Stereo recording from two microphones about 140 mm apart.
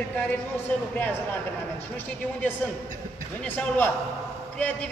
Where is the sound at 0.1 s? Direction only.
10° left (ahead or behind).